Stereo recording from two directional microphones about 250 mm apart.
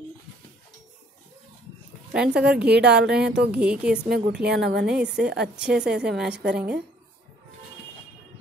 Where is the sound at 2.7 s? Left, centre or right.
Right.